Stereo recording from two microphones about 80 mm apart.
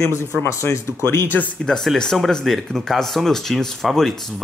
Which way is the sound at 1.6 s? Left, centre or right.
Centre.